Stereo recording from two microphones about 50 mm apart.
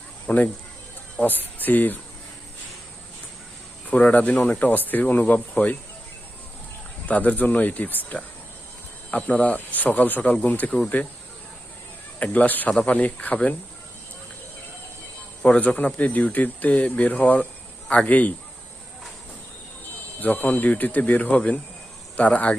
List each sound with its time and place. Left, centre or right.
0.3 s speech: left
3.8 s speech: left
7.1 s speech: left
12.2 s speech: left
15.4 s speech: left
20.1 s speech: left